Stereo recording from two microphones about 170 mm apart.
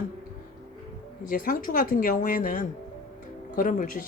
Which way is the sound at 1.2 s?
55° left (ahead or behind).